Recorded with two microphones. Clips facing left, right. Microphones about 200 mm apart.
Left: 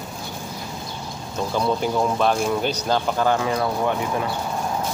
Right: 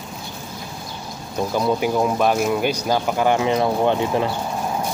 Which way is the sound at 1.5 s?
10° right (ahead or behind).